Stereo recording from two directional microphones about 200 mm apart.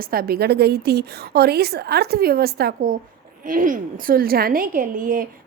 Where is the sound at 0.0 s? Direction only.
45° right (ahead or behind).